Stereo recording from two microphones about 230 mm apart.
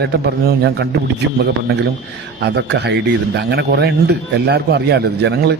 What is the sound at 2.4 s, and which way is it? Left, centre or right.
Speech, right.